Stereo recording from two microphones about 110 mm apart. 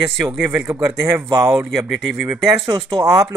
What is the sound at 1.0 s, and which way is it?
Speech, 25° right (ahead or behind).